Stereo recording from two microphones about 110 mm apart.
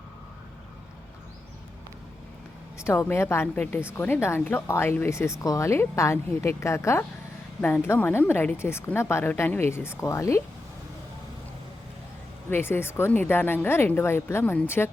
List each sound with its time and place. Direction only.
2.7 s speech: 25° left (ahead or behind)
12.5 s speech: 20° left (ahead or behind)